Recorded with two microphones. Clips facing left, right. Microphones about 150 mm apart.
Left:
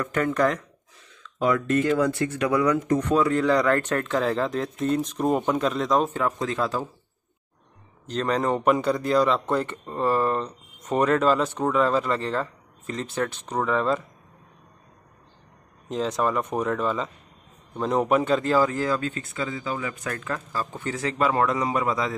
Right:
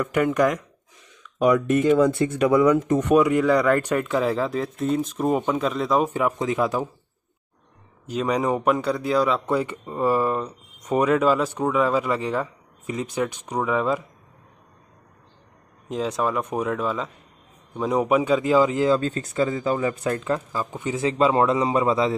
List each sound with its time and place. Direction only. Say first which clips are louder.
0.0 s speech: right 3 dB; 10° right (ahead or behind)
6.0 s speech: right 3 dB; 15° right (ahead or behind)
8.1 s speech: right 1 dB; 10° right (ahead or behind)
15.9 s speech: even; 5° right (ahead or behind); by 22.1 s 25° right (ahead or behind)